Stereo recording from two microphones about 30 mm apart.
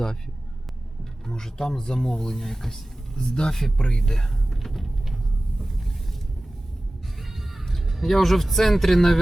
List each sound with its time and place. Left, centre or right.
1.3 s speech: centre
4.5 s a sound: centre
5.5 s boat: centre
7.7 s music: centre
8.0 s speech: centre